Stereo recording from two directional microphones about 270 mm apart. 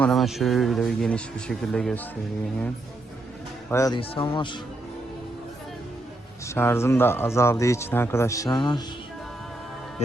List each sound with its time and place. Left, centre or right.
0.0 s speech: centre
3.7 s speech: centre
6.5 s speech: centre